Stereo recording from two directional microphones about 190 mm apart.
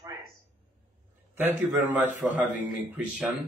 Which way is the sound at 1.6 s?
10° right (ahead or behind).